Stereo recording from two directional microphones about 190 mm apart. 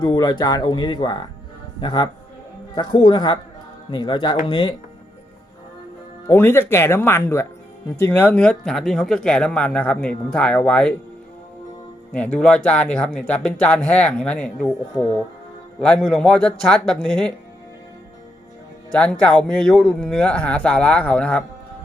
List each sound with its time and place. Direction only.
0.0 s speech: 20° left (ahead or behind)
6.2 s speech: 15° left (ahead or behind)
12.1 s speech: 5° left (ahead or behind)
15.8 s speech: 5° left (ahead or behind)
18.9 s speech: 5° left (ahead or behind)